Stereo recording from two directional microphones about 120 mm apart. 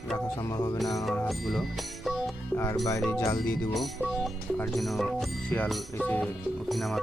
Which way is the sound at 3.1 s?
25° left (ahead or behind).